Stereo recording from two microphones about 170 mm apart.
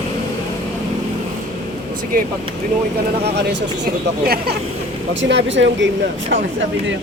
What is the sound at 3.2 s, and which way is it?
Speech, 85° right.